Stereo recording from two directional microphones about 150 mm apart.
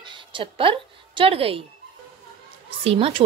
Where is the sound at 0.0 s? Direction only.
35° right (ahead or behind).